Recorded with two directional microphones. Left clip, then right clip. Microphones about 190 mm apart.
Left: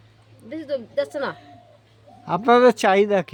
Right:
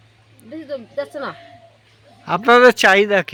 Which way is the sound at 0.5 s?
35° left (ahead or behind).